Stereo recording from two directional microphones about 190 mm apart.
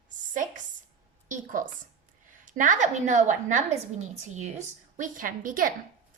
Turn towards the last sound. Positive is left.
turn(degrees=-45)  # may be behind; listen again after turning